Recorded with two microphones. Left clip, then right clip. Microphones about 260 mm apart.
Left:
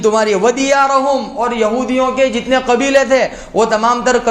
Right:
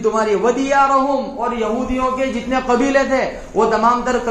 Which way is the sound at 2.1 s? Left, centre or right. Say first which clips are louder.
Left 6 dB; left.